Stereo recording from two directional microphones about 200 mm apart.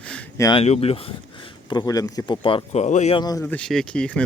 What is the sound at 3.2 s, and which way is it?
Speech, 20° left (ahead or behind).